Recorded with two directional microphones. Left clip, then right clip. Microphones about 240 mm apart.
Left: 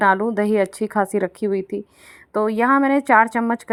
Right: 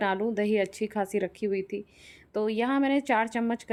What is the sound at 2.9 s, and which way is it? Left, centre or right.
Speech, centre.